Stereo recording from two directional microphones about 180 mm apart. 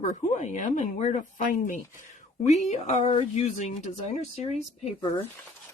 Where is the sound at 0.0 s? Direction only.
40° left (ahead or behind).